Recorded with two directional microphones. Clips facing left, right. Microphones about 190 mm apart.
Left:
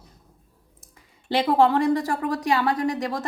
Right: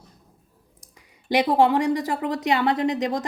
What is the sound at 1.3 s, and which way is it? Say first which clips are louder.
A woman's voice: right 1 dB; 15° right (ahead or behind).